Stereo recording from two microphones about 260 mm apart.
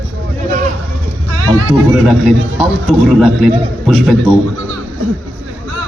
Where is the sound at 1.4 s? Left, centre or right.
Right.